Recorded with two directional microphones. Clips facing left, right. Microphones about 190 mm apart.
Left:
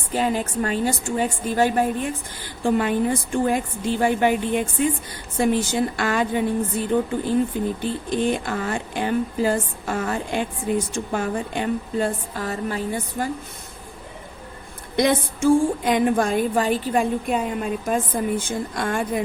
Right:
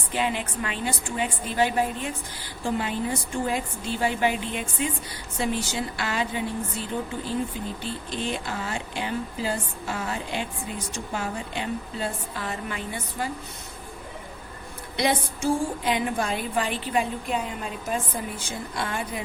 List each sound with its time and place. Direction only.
0.1 s speech: 40° left (ahead or behind)
14.9 s speech: 50° left (ahead or behind)